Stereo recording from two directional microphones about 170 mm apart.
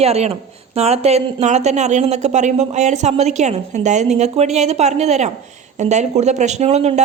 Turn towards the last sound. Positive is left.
turn(degrees=-40)  # may be behind; listen again after turning